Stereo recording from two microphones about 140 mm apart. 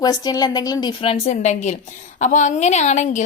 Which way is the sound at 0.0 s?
30° left (ahead or behind).